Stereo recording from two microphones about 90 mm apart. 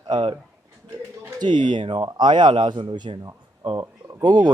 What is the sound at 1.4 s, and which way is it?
A man's voice, 60° right (ahead or behind).